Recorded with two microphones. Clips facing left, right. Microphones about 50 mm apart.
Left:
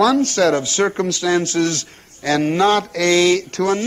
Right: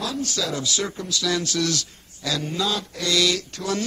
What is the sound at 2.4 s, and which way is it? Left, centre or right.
Speech, left.